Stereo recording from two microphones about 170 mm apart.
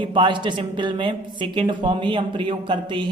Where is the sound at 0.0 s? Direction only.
30° right (ahead or behind).